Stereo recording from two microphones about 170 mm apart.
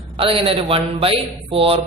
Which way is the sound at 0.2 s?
35° right (ahead or behind).